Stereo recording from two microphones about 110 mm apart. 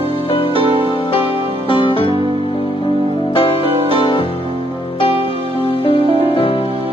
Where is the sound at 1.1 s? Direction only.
55° left (ahead or behind).